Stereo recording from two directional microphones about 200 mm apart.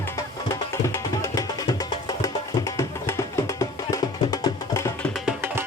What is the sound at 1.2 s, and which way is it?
Music, 20° left (ahead or behind).